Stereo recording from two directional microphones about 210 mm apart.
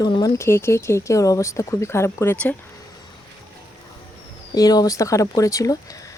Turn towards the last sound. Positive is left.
turn(degrees=15)  # may be behind; listen again after turning